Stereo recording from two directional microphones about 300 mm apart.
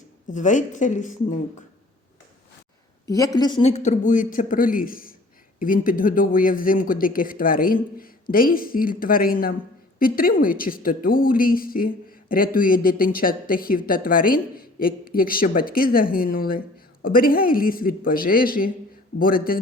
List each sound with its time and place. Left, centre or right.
0.3 s a woman's voice: left
3.1 s a woman's voice: centre; by 19.5 s left